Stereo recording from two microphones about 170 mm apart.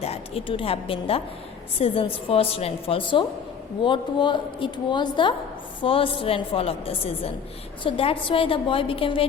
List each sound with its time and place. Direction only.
0.0 s a woman's voice: 35° left (ahead or behind)